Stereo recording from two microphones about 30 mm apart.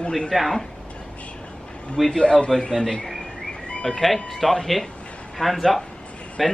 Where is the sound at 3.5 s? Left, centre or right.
Left.